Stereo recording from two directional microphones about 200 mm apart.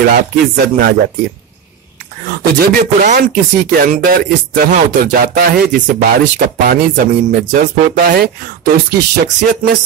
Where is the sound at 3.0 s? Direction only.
40° right (ahead or behind).